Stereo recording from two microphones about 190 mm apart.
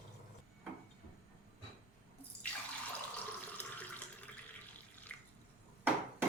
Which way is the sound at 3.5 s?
10° left (ahead or behind).